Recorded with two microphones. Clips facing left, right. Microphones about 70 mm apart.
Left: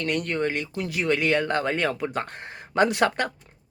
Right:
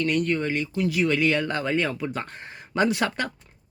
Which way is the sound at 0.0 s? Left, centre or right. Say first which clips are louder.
Right 2 dB; left.